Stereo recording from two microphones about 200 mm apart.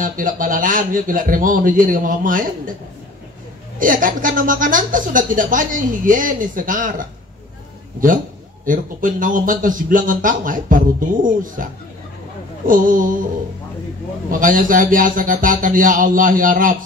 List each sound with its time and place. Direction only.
0.0 s a man's voice: 40° right (ahead or behind)
3.8 s speech: 40° right (ahead or behind)
8.6 s a man's voice: 40° right (ahead or behind)
12.6 s a man's voice: 40° right (ahead or behind)
14.3 s a man's voice: 40° right (ahead or behind)